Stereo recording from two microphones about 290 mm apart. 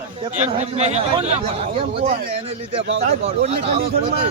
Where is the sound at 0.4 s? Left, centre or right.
Right.